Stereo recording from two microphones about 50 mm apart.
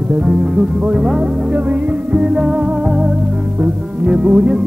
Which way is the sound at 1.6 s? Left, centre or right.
Right.